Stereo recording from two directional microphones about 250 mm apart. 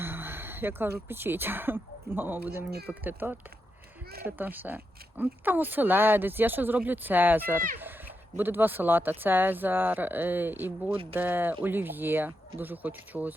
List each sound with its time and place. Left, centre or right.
0.0 s speech: centre